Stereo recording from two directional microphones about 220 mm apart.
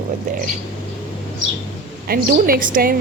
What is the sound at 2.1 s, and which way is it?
Speech, 40° right (ahead or behind).